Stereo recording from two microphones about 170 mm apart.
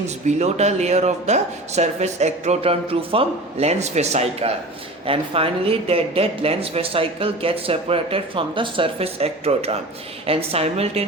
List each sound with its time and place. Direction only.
0.3 s speech: 40° right (ahead or behind)